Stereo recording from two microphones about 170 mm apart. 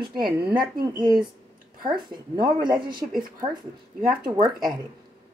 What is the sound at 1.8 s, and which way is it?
Speech, 25° right (ahead or behind).